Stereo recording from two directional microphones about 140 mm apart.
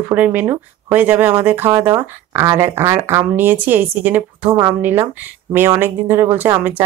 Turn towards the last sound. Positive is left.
turn(degrees=-20)  # may be behind; listen again after turning